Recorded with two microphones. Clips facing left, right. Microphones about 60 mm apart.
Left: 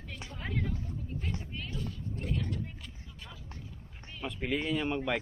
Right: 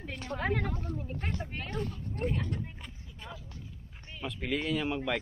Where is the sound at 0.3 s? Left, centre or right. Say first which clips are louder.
Right 5 dB; right.